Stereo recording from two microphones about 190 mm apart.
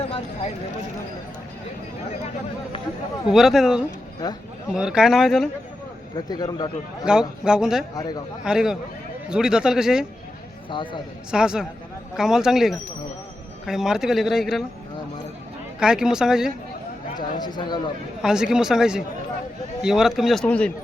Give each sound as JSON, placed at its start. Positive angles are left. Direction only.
{"t": 3.2, "sound": "speech", "side_deg": 0}
{"t": 4.2, "sound": "speech", "side_deg": 20}
{"t": 4.7, "sound": "speech", "side_deg": -5}
{"t": 6.1, "sound": "speech", "side_deg": 20}
{"t": 7.0, "sound": "speech", "side_deg": -5}
{"t": 7.9, "sound": "speech", "side_deg": 20}
{"t": 8.4, "sound": "speech", "side_deg": -5}
{"t": 10.7, "sound": "speech", "side_deg": 25}
{"t": 11.3, "sound": "speech", "side_deg": -5}
{"t": 15.8, "sound": "speech", "side_deg": -5}
{"t": 17.4, "sound": "speech", "side_deg": 20}
{"t": 18.2, "sound": "speech", "side_deg": -5}